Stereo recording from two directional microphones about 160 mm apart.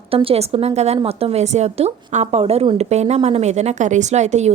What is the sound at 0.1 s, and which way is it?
A woman's voice, 35° right (ahead or behind).